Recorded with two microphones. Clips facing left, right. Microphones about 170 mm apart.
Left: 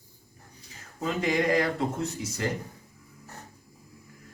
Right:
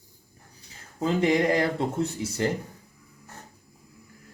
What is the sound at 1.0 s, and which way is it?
Speech, 30° right (ahead or behind).